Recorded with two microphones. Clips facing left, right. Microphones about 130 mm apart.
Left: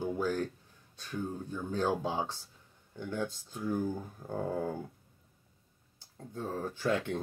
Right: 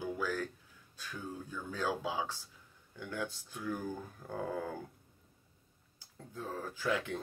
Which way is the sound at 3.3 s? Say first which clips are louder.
Left 4 dB; 20° left (ahead or behind).